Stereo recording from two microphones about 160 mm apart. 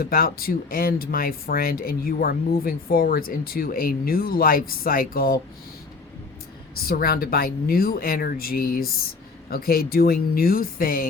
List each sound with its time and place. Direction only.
0.0 s speech: 70° left (ahead or behind)
6.7 s speech: 70° left (ahead or behind)